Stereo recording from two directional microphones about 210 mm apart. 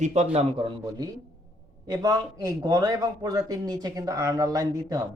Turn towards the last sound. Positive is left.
turn(degrees=-15)  # may be behind; listen again after turning